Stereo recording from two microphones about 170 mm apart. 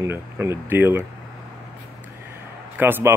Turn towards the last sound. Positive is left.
turn(degrees=-10)  # may be behind; listen again after turning